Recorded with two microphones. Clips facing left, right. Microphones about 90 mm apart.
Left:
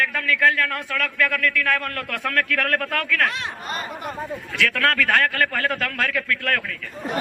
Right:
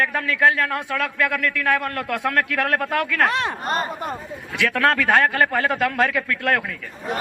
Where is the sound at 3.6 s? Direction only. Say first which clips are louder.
Right 5 dB; 50° right (ahead or behind).